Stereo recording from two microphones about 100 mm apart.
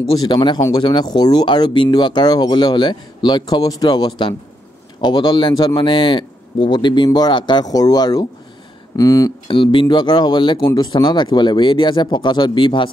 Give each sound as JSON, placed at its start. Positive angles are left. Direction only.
{"t": 0.2, "sound": "speech", "side_deg": 50}
{"t": 0.6, "sound": "speech", "side_deg": 35}
{"t": 0.8, "sound": "speech", "side_deg": 45}
{"t": 9.5, "sound": "speech", "side_deg": 55}